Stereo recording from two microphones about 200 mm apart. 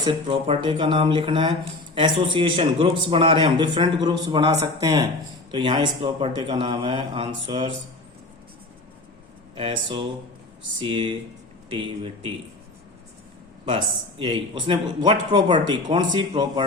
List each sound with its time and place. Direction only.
0.0 s speech: 25° right (ahead or behind)
9.6 s speech: 25° right (ahead or behind)
13.7 s speech: 25° right (ahead or behind)